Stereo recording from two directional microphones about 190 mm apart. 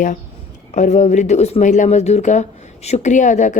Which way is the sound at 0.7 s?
40° left (ahead or behind).